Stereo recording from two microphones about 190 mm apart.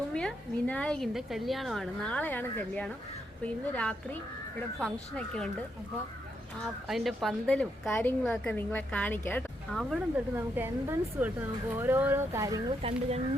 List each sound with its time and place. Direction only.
0.1 s a woman's voice: 5° left (ahead or behind)
6.8 s a woman's voice: centre (ahead or behind)
9.7 s a woman's voice: centre (ahead or behind)
10.3 s a woman's voice: 10° right (ahead or behind)
12.8 s speech: 35° right (ahead or behind)